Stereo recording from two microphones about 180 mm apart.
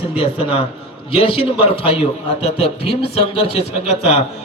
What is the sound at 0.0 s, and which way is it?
A man's voice, 30° left (ahead or behind).